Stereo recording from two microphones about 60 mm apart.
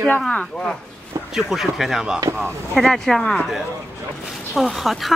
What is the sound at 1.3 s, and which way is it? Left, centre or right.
Speech, centre.